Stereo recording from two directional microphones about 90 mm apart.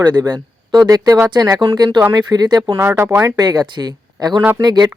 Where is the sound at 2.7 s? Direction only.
25° right (ahead or behind); by 4.9 s 50° right (ahead or behind).